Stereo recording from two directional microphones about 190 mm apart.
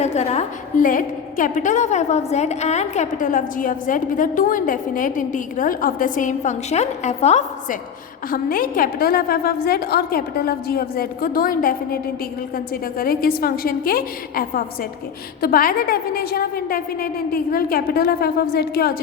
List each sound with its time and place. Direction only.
0.0 s a woman's voice: 35° left (ahead or behind)
8.3 s a woman's voice: 50° left (ahead or behind)